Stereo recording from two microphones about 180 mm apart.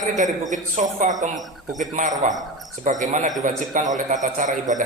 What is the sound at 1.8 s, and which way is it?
A man's voice, 45° right (ahead or behind).